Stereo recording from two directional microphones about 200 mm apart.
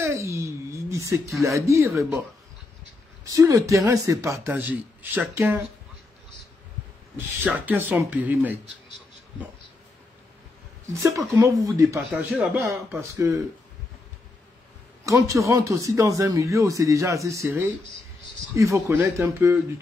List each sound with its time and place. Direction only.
0.0 s speech: 15° right (ahead or behind)
3.3 s speech: 15° right (ahead or behind)
7.2 s speech: 10° right (ahead or behind)
10.9 s speech: 15° right (ahead or behind)
12.0 s a man's voice: 5° right (ahead or behind)
13.1 s speech: 15° right (ahead or behind)
15.0 s speech: 15° right (ahead or behind)